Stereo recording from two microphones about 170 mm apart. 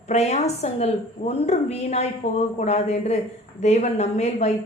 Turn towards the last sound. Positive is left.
turn(degrees=40)  # may be behind; listen again after turning